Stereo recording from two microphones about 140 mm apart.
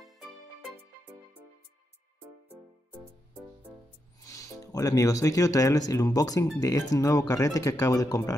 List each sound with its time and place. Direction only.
0.0 s music: centre (ahead or behind)
4.2 s speech: 25° left (ahead or behind)